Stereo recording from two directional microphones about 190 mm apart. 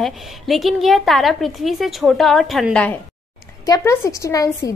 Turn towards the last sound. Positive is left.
turn(degrees=15)  # may be behind; listen again after turning